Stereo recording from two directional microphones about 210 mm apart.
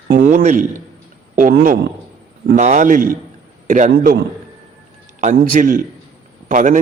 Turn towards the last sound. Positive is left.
turn(degrees=-35)  # may be behind; listen again after turning